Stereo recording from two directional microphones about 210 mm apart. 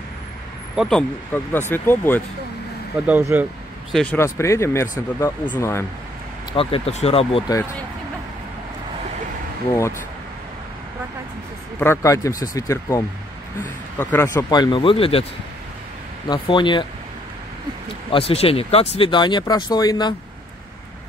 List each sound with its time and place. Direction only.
0.7 s speech: 5° left (ahead or behind)
3.1 s speech: 10° right (ahead or behind)
3.9 s speech: 5° left (ahead or behind)
6.5 s speech: 25° left (ahead or behind)
11.8 s speech: 15° left (ahead or behind)
16.3 s speech: 20° left (ahead or behind)
18.1 s speech: 30° left (ahead or behind)